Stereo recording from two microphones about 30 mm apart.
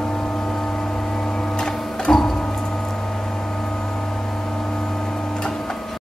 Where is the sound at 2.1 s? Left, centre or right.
Left.